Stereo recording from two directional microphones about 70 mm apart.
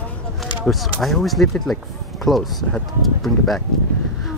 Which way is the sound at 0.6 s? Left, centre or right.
Centre.